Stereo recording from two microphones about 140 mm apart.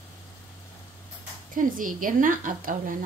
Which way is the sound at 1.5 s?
75° right (ahead or behind).